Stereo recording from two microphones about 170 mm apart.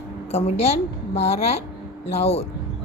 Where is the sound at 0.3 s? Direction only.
35° left (ahead or behind).